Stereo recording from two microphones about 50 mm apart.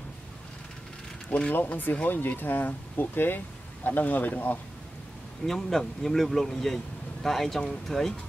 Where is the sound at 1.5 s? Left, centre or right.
Left.